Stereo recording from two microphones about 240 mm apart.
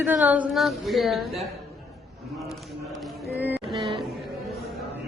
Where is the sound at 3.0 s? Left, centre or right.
Centre.